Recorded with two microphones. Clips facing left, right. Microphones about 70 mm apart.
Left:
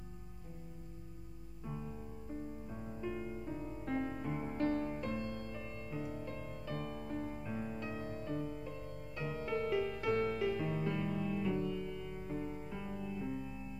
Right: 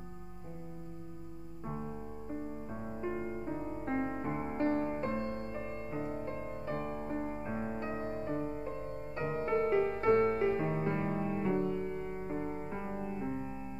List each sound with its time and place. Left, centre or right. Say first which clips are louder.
1.7 s music: right 4 dB; right